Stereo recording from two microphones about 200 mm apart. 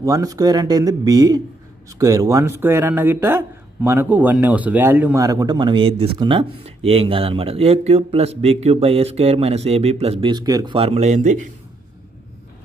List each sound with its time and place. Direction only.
0.0 s speech: 15° right (ahead or behind); by 11.3 s 35° right (ahead or behind)